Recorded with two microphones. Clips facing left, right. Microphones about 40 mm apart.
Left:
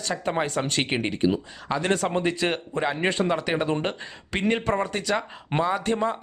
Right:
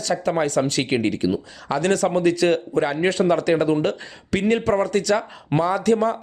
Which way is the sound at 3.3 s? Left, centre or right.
Centre.